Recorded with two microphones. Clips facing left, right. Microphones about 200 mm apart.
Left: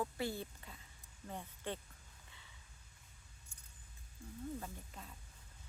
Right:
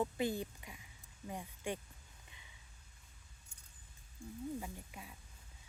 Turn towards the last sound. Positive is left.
turn(degrees=-10)  # may be behind; listen again after turning